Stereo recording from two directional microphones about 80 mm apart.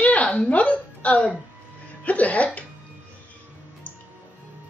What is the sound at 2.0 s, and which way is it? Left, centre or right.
Speech, centre.